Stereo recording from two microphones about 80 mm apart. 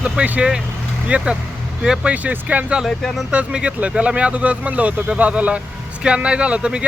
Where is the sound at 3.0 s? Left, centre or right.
Centre.